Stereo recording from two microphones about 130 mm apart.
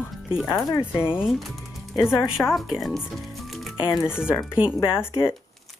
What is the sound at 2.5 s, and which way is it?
Speech, centre (ahead or behind).